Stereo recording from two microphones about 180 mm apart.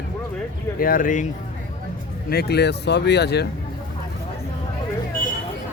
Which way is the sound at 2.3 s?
65° left (ahead or behind).